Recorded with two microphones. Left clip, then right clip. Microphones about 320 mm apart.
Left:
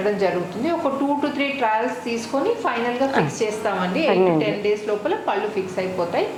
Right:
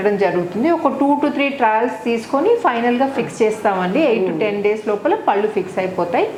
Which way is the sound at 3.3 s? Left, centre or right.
Right.